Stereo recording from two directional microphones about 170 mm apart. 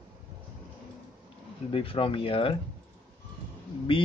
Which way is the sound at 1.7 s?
30° left (ahead or behind).